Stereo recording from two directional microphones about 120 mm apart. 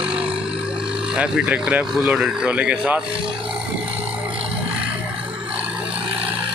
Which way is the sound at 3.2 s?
45° right (ahead or behind).